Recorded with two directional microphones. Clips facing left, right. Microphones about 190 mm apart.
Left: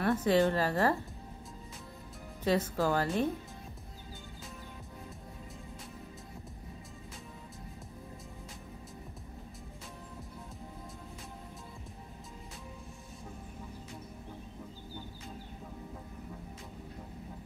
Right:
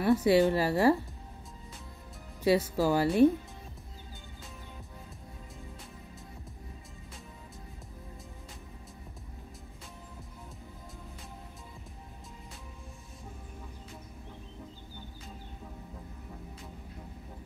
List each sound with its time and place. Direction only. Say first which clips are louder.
0.0 s a woman's voice: right 4 dB; 10° right (ahead or behind)
2.4 s a woman's voice: right 4 dB; 10° right (ahead or behind)